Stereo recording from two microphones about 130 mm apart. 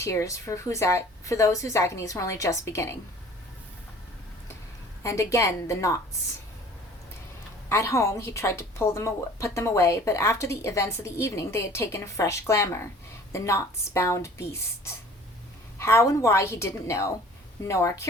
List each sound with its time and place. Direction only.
0.0 s a woman's voice: 25° left (ahead or behind)
5.0 s a woman's voice: 25° left (ahead or behind)
7.7 s a woman's voice: 20° left (ahead or behind)
15.8 s a woman's voice: 20° left (ahead or behind)